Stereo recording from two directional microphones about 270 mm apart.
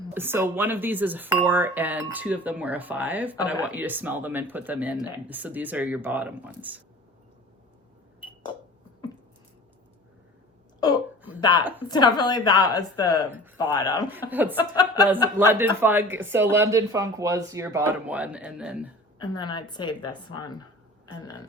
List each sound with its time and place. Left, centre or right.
0.1 s speech: centre
10.8 s a woman's voice: centre
14.1 s speech: centre
14.6 s a woman's voice: centre
15.4 s speech: centre
19.2 s a woman's voice: centre